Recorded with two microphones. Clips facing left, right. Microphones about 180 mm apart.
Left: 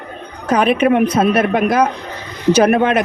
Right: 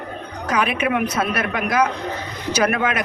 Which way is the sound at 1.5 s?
55° left (ahead or behind).